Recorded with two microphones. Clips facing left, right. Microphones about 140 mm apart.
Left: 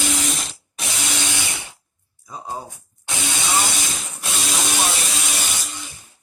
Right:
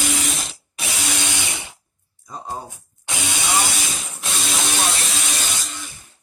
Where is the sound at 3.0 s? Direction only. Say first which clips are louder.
Even; 10° right (ahead or behind).